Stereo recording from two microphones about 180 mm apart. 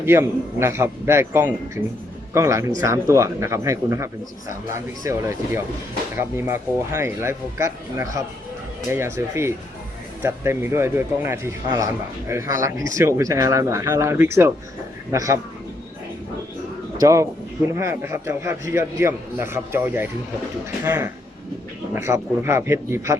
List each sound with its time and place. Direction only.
0.0 s speech: 15° right (ahead or behind)
17.0 s speech: 15° right (ahead or behind)